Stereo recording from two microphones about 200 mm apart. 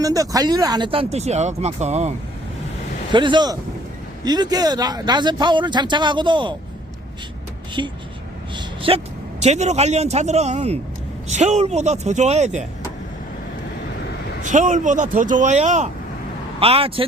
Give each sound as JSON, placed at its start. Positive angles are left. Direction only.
{"t": 0.0, "sound": "speech", "side_deg": -15}
{"t": 3.1, "sound": "speech", "side_deg": -25}
{"t": 7.8, "sound": "speech", "side_deg": -20}
{"t": 8.5, "sound": "a sound", "side_deg": -25}
{"t": 9.4, "sound": "speech", "side_deg": -35}
{"t": 14.4, "sound": "speech", "side_deg": -40}